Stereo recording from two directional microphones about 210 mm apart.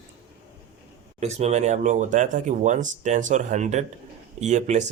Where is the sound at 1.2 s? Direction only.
30° right (ahead or behind).